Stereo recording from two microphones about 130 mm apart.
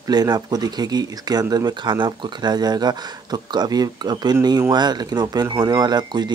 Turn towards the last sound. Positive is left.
turn(degrees=-35)  # may be behind; listen again after turning